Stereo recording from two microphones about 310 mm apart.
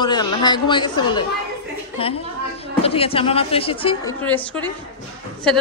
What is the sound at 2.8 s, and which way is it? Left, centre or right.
A woman's voice, centre.